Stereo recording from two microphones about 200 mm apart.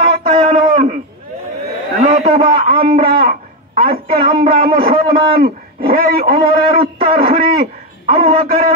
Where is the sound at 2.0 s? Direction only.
25° right (ahead or behind).